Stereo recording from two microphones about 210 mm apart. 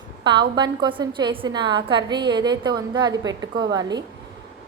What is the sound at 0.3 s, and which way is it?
A woman's voice, 20° right (ahead or behind).